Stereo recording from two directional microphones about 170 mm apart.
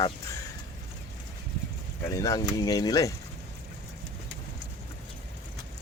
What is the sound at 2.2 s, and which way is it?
Speech, 20° left (ahead or behind).